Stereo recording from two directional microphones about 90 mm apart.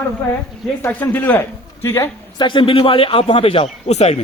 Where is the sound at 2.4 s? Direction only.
60° left (ahead or behind); by 3.7 s 80° left.